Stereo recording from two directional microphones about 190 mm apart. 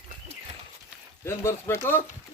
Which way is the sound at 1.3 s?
15° left (ahead or behind).